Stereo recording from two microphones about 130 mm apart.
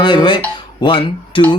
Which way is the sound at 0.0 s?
35° left (ahead or behind).